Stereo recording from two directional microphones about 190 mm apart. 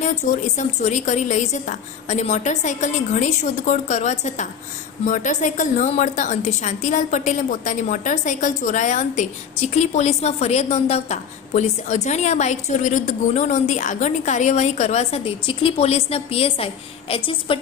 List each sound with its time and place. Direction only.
0.0 s a woman's voice: 40° left (ahead or behind)